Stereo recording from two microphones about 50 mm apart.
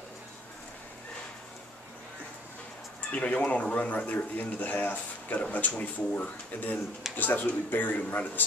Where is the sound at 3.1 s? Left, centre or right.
Left.